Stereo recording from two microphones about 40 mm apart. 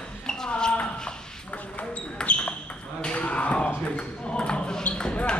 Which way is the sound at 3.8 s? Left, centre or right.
Left.